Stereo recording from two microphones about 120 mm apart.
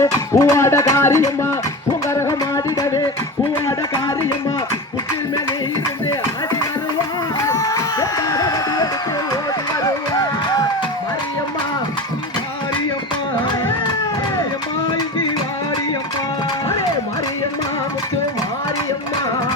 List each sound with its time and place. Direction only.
0.0 s music: 25° left (ahead or behind)
7.4 s music: 25° left (ahead or behind)